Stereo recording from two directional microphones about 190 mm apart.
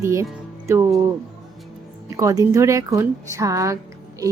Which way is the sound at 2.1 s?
15° right (ahead or behind).